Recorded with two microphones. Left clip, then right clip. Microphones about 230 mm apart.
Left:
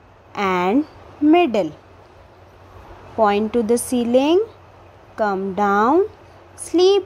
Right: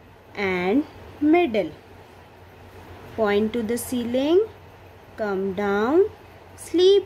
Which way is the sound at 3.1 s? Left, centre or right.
Centre.